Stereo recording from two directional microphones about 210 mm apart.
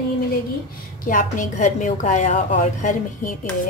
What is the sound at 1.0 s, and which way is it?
Speech, 40° left (ahead or behind).